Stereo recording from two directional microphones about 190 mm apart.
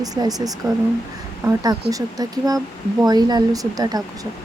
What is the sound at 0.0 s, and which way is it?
Speech, 20° right (ahead or behind).